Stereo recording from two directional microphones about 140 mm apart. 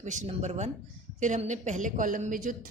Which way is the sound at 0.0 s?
60° right (ahead or behind).